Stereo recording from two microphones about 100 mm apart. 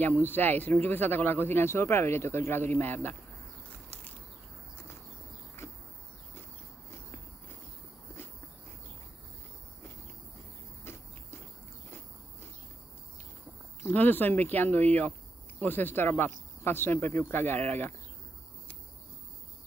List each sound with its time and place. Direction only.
0.3 s speech: 20° left (ahead or behind)
10.8 s cricket: 25° left (ahead or behind)
13.8 s speech: 15° left (ahead or behind)